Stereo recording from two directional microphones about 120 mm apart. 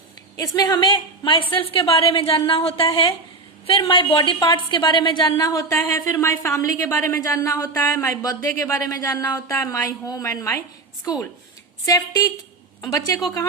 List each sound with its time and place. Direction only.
0.3 s a woman's voice: 30° left (ahead or behind)